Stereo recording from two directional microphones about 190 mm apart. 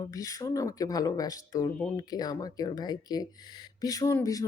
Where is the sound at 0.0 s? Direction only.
20° left (ahead or behind).